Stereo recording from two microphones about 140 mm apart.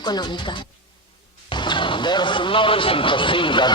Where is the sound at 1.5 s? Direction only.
35° left (ahead or behind).